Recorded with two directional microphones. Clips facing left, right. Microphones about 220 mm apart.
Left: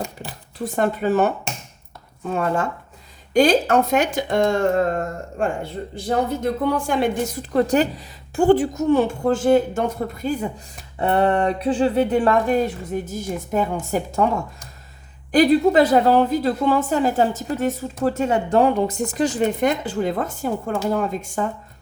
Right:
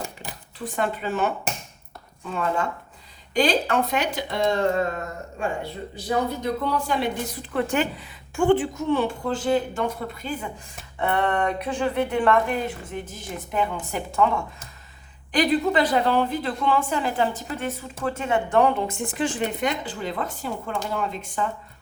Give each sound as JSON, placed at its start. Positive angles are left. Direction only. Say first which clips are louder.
{"t": 0.6, "sound": "a woman's voice", "louder": "left 6 dB", "side_deg": 45}
{"t": 15.3, "sound": "a woman's voice", "louder": "left 6 dB", "side_deg": 45}